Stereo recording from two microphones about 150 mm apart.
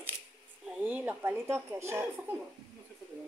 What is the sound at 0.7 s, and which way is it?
Speech, 10° right (ahead or behind).